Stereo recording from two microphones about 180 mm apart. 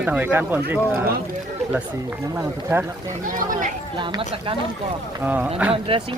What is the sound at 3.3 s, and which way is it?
Speech, 50° right (ahead or behind).